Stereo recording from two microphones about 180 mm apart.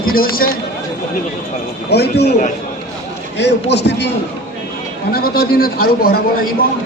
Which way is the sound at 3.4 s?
70° left (ahead or behind).